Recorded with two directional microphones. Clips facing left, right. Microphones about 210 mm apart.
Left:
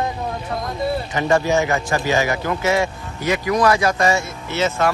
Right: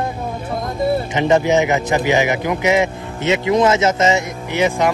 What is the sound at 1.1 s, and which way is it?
A man's voice, 20° right (ahead or behind).